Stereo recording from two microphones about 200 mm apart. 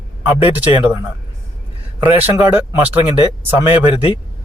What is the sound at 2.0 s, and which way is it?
Speech, 10° right (ahead or behind).